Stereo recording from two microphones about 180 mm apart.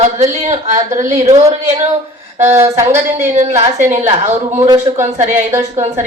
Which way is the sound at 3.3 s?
35° right (ahead or behind).